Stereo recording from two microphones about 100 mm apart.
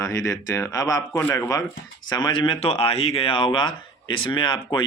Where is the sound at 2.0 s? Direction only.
50° left (ahead or behind).